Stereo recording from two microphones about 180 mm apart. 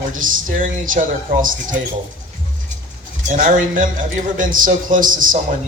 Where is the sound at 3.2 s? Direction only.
50° right (ahead or behind).